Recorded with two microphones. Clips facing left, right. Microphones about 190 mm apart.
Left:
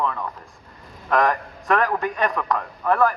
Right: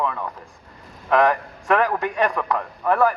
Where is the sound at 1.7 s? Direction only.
10° right (ahead or behind).